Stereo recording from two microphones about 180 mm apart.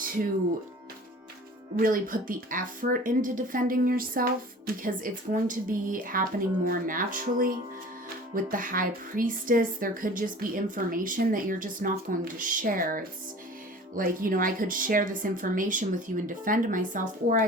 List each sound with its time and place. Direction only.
1.8 s speech: 50° right (ahead or behind)